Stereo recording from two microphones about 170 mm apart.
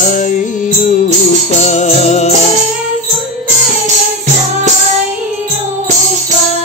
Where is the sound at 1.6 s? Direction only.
45° left (ahead or behind).